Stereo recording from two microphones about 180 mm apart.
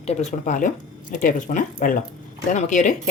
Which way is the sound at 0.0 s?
40° left (ahead or behind).